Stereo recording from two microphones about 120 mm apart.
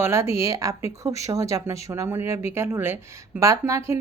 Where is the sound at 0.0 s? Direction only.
20° right (ahead or behind).